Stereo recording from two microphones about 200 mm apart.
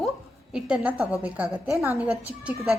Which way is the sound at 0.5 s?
5° right (ahead or behind).